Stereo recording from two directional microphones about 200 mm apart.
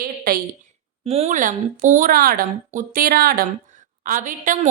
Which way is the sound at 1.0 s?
30° right (ahead or behind).